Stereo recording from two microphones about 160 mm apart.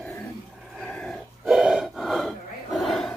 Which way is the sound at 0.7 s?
5° left (ahead or behind).